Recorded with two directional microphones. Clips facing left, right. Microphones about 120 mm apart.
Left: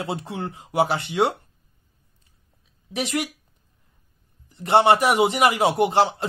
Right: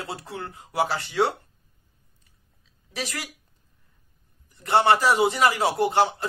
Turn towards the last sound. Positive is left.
turn(degrees=25)  # may be behind; listen again after turning